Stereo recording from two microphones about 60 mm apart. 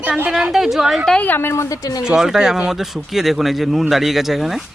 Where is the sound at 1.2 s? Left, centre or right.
Left.